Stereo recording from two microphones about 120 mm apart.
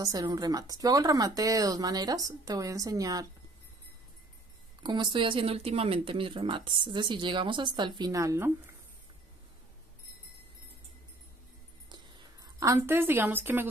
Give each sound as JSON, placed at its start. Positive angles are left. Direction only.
{"t": 0.0, "sound": "speech", "side_deg": -30}
{"t": 4.8, "sound": "speech", "side_deg": -40}
{"t": 11.9, "sound": "a sound", "side_deg": -30}